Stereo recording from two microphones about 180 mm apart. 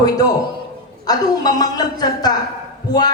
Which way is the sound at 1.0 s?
20° left (ahead or behind).